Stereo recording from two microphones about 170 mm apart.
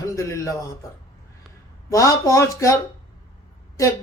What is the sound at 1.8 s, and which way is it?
Speech, 20° left (ahead or behind).